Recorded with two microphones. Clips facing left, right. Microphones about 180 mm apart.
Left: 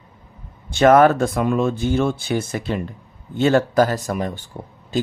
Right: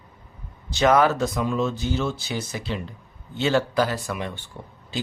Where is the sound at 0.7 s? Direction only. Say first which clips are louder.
Left 6 dB; 55° left (ahead or behind).